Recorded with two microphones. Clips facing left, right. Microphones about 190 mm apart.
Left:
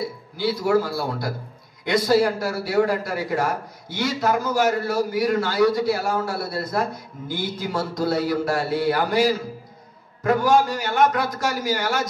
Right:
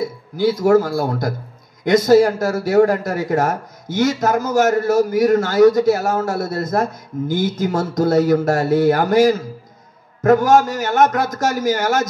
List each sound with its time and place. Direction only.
0.0 s a man's voice: 45° right (ahead or behind)